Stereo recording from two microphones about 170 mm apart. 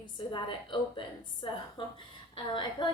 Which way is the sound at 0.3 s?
30° left (ahead or behind).